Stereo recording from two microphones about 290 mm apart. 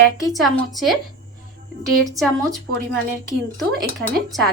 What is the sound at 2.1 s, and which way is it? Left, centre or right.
Speech, centre.